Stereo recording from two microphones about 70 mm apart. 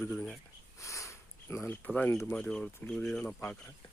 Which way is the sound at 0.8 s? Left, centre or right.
Left.